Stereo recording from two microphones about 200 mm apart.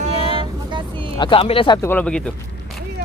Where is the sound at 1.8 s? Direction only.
5° left (ahead or behind).